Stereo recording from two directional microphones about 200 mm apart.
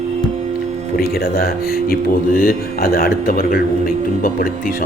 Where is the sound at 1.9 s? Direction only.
45° left (ahead or behind).